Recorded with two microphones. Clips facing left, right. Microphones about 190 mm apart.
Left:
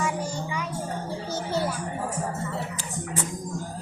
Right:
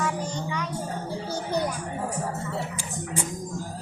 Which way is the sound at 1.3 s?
15° right (ahead or behind).